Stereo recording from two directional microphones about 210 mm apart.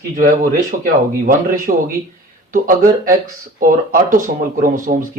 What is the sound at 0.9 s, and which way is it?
Speech, 40° right (ahead or behind).